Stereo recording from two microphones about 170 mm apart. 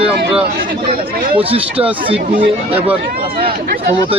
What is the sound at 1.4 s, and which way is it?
Speech, 35° right (ahead or behind).